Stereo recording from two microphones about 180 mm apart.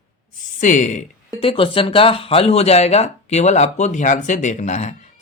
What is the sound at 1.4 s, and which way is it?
Speech, 30° left (ahead or behind).